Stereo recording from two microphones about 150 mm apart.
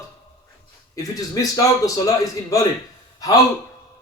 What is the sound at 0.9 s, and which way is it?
A man's voice, 25° left (ahead or behind).